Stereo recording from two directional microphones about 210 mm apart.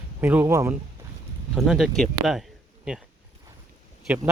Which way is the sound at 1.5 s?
Centre (ahead or behind).